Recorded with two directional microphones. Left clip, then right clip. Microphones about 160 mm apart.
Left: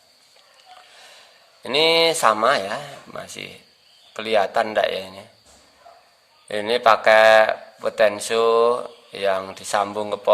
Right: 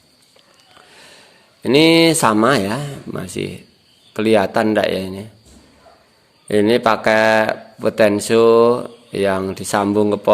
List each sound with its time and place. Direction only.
0.9 s a sound: 25° right (ahead or behind)
1.6 s speech: 25° right (ahead or behind)
6.5 s speech: 25° right (ahead or behind)